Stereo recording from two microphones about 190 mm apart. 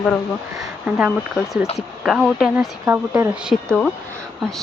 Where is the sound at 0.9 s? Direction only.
5° right (ahead or behind).